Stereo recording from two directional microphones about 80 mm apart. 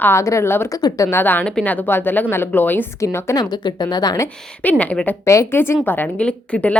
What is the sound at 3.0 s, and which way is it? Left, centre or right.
Speech, left.